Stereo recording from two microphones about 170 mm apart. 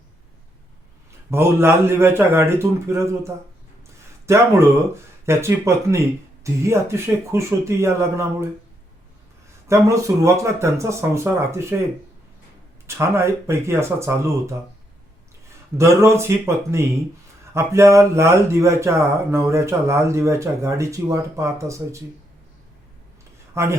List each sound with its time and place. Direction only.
1.3 s speech: 15° right (ahead or behind)
9.6 s speech: 15° right (ahead or behind)
12.9 s speech: 15° right (ahead or behind)
15.8 s speech: 15° right (ahead or behind)
23.6 s speech: 15° right (ahead or behind)